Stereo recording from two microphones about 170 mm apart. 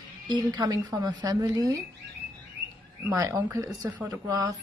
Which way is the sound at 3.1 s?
20° right (ahead or behind).